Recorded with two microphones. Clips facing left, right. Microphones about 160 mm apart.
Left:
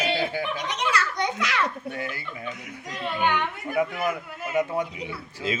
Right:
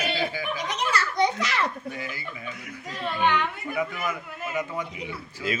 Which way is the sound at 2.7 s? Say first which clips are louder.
Right 2 dB; 10° left (ahead or behind).